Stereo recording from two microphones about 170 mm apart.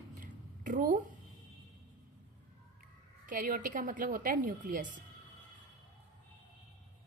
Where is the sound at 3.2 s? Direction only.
55° right (ahead or behind).